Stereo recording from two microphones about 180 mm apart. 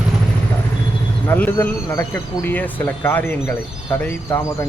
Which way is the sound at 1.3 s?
10° left (ahead or behind).